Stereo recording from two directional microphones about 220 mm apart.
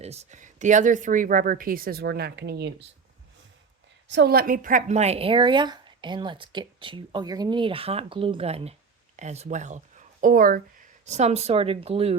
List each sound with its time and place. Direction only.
0.0 s a woman's voice: 30° right (ahead or behind); by 2.8 s 50° right (ahead or behind)
4.1 s speech: 50° right (ahead or behind); by 12.1 s 25° right (ahead or behind)